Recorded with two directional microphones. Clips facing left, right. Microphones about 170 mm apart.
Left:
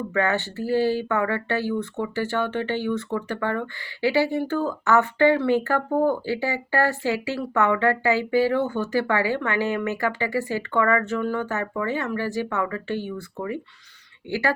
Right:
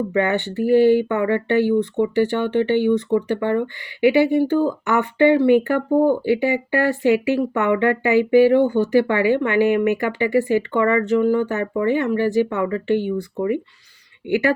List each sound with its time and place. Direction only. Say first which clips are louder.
0.1 s speech: right 4 dB; 20° right (ahead or behind)
14.3 s speech: right 6 dB; 20° right (ahead or behind)